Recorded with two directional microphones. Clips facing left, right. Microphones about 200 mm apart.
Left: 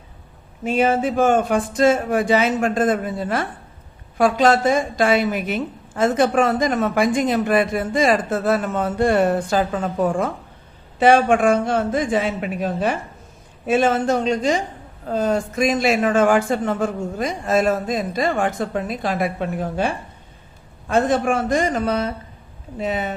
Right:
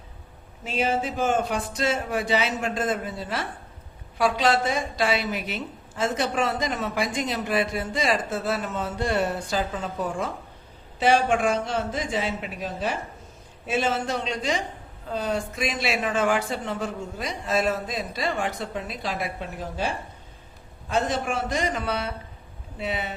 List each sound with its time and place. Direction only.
0.6 s a woman's voice: 55° left (ahead or behind)